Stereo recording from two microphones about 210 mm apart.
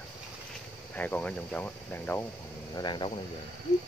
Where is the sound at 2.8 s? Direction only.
20° left (ahead or behind).